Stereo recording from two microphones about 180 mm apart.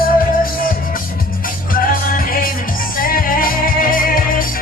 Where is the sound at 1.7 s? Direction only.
50° left (ahead or behind).